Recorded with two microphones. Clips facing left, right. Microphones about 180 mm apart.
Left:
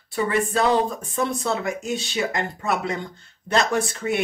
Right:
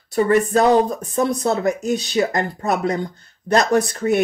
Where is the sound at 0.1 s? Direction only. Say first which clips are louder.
Right 7 dB; 40° right (ahead or behind).